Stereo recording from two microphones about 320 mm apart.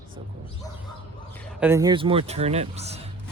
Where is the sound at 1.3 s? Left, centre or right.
Centre.